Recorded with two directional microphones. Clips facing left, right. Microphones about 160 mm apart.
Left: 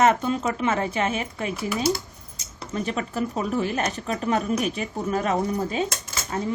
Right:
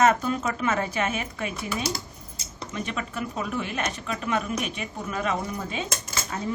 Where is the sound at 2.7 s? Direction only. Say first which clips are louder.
Left 5 dB; 35° left (ahead or behind).